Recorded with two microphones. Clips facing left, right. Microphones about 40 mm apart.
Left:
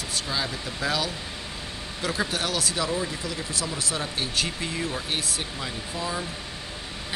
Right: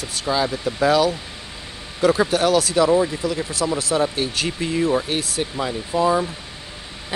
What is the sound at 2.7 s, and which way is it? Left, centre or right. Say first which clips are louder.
Speech: right 11 dB; right.